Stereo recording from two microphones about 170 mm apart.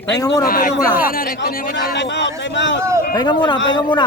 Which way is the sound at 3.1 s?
25° left (ahead or behind).